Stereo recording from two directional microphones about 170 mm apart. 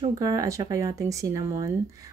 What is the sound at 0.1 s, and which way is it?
Speech, 20° right (ahead or behind).